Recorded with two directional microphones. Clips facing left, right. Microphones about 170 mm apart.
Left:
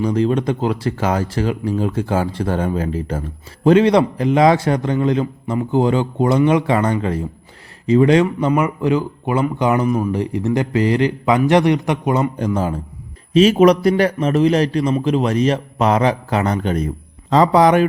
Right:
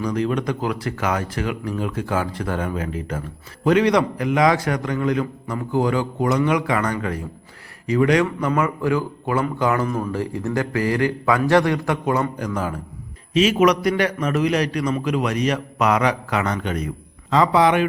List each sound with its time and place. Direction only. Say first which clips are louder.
0.0 s a man's voice: left 5 dB; 30° left (ahead or behind)